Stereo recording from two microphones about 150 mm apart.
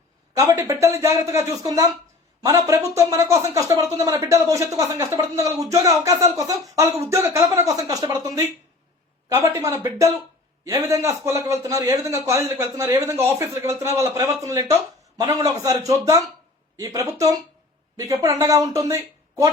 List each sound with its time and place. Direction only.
0.3 s a man's voice: 20° right (ahead or behind)